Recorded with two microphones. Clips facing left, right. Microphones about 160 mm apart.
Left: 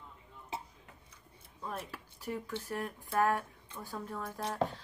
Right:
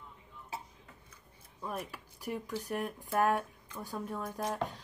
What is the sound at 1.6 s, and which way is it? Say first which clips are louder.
A woman's voice: right 2 dB; 10° right (ahead or behind).